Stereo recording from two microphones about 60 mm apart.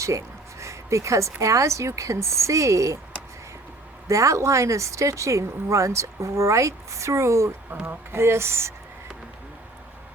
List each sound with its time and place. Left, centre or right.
0.0 s a woman's voice: right
4.1 s speech: right